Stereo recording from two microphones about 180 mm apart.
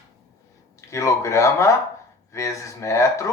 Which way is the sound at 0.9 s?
15° left (ahead or behind).